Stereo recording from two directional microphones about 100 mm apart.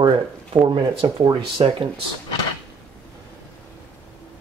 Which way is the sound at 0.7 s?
45° right (ahead or behind).